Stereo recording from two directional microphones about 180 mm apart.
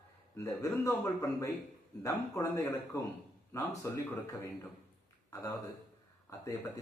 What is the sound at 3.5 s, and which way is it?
Speech, 15° left (ahead or behind).